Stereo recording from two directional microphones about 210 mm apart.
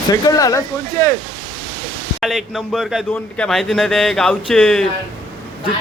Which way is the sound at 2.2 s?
Centre (ahead or behind).